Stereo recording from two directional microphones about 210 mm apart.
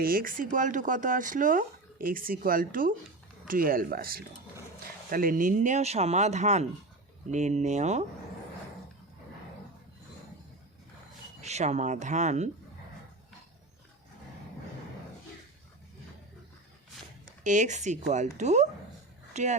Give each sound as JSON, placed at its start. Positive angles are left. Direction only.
{"t": 0.0, "sound": "speech", "side_deg": -45}
{"t": 11.3, "sound": "speech", "side_deg": -35}
{"t": 17.4, "sound": "speech", "side_deg": -35}